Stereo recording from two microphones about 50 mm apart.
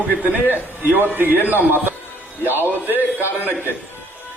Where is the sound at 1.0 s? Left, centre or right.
Right.